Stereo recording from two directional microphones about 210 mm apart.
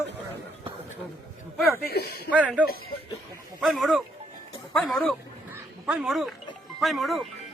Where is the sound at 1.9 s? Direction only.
50° left (ahead or behind).